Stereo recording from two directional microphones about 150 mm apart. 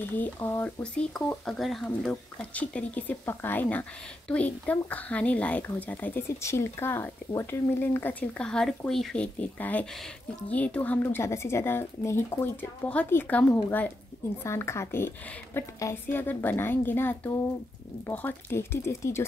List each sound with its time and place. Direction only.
0.2 s a woman's voice: 15° left (ahead or behind)
1.1 s a woman's voice: centre (ahead or behind); by 19.2 s 20° left (ahead or behind)